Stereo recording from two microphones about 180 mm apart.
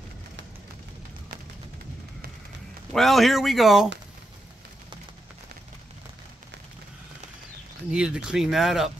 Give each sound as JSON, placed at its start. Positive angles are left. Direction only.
{"t": 2.9, "sound": "speech", "side_deg": 0}
{"t": 7.9, "sound": "speech", "side_deg": -5}